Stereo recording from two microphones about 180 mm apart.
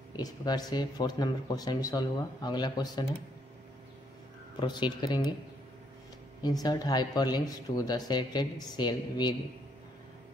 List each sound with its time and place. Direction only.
0.1 s speech: 20° left (ahead or behind)
4.6 s speech: 25° left (ahead or behind)
6.4 s speech: 20° left (ahead or behind)